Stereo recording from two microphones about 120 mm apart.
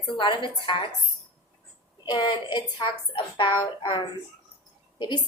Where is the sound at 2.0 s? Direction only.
40° left (ahead or behind).